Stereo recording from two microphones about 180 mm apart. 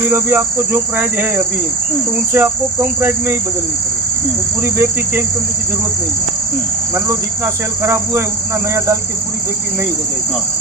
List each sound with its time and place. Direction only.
0.1 s cricket: 10° right (ahead or behind)
2.3 s cricket: 10° right (ahead or behind)
4.6 s cricket: 15° right (ahead or behind)
6.9 s cricket: 15° right (ahead or behind)